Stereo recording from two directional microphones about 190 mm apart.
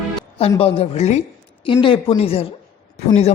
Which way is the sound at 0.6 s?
30° left (ahead or behind).